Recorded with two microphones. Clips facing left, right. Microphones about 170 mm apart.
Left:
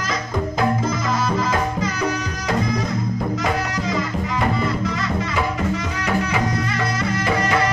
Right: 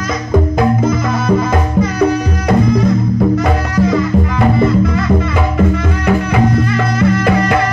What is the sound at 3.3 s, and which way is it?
Music, 55° right (ahead or behind).